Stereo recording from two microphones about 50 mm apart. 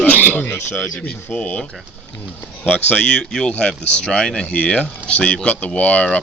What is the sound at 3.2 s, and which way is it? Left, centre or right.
A man's voice, centre.